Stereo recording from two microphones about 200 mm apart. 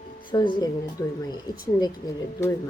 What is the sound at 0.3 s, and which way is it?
Speech, 25° left (ahead or behind).